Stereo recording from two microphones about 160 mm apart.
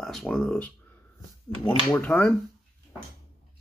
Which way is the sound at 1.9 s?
10° left (ahead or behind).